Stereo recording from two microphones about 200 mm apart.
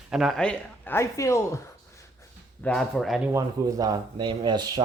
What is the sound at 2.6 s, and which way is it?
Speech, centre (ahead or behind).